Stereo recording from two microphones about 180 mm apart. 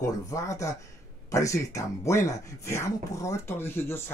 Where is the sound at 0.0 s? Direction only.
20° left (ahead or behind).